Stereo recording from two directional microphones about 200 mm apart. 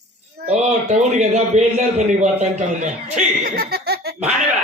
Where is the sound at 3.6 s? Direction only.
55° right (ahead or behind).